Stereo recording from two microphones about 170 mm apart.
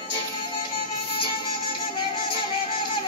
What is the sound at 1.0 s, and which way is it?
Music, 30° left (ahead or behind).